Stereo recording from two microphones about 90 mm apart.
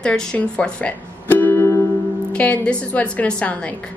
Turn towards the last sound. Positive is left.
turn(degrees=15)  # may be behind; listen again after turning